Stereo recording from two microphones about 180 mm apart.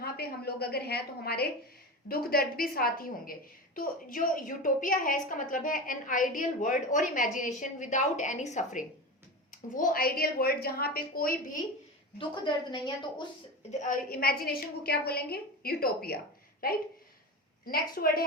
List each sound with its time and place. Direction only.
0.0 s a woman's voice: 60° left (ahead or behind)
12.2 s a woman's voice: 25° left (ahead or behind)
13.7 s a woman's voice: 45° left (ahead or behind)